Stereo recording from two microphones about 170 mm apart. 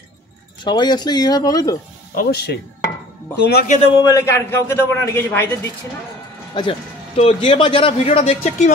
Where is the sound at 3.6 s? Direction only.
45° left (ahead or behind).